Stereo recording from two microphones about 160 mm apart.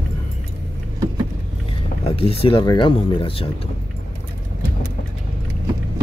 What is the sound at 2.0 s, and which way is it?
Speech, 35° left (ahead or behind).